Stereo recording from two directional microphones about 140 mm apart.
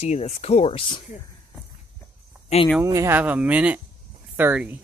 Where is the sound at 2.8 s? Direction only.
20° right (ahead or behind).